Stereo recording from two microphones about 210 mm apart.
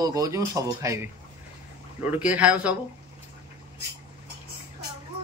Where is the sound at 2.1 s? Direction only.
5° right (ahead or behind).